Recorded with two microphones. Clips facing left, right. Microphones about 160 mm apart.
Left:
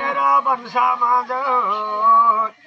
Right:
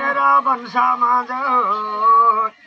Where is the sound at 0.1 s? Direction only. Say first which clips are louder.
Right 1 dB; 15° left (ahead or behind).